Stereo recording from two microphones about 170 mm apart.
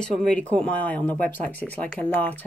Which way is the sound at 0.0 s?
5° left (ahead or behind).